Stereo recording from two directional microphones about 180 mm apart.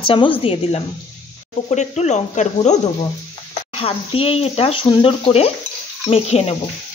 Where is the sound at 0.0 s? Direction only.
30° left (ahead or behind).